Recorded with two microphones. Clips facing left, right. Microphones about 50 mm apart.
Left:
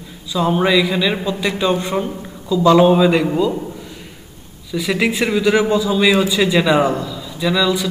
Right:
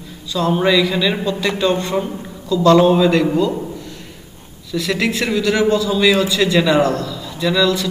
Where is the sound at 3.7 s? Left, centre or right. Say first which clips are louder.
Right 1 dB; centre.